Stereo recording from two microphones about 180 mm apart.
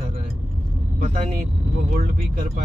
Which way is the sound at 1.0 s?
50° right (ahead or behind).